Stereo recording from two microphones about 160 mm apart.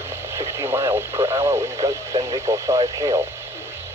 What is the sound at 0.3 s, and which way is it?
Speech, 15° right (ahead or behind).